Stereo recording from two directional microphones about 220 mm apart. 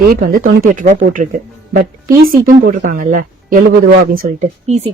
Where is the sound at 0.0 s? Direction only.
40° right (ahead or behind).